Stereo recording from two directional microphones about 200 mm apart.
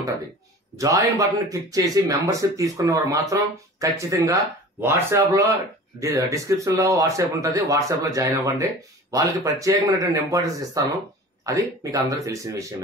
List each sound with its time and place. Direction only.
0.7 s speech: 15° right (ahead or behind)